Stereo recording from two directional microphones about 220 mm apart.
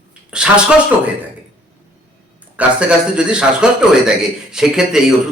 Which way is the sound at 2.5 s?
5° right (ahead or behind).